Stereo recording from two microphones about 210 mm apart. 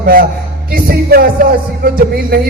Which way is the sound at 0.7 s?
45° right (ahead or behind).